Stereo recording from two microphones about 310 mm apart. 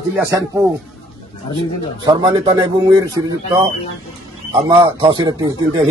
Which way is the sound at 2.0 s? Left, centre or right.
Centre.